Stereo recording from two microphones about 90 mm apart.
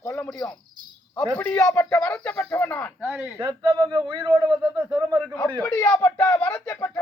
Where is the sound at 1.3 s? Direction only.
15° left (ahead or behind).